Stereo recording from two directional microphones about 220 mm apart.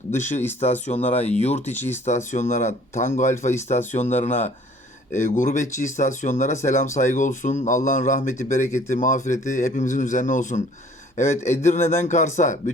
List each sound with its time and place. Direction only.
0.1 s speech: 35° left (ahead or behind)
1.7 s speech: 10° left (ahead or behind)
2.0 s speech: 30° left (ahead or behind)